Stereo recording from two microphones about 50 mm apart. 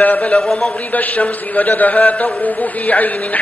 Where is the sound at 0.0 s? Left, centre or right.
Left.